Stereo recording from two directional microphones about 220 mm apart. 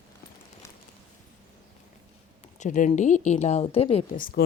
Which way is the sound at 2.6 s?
35° left (ahead or behind).